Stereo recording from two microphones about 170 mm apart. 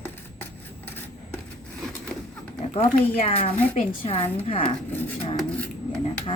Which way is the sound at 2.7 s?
35° left (ahead or behind).